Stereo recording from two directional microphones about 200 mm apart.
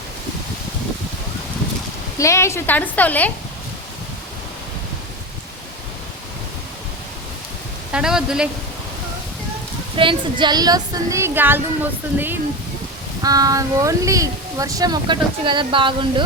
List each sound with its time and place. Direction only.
2.1 s a woman's voice: 15° left (ahead or behind)
7.9 s a man's voice: 5° right (ahead or behind)
9.9 s speech: 25° right (ahead or behind)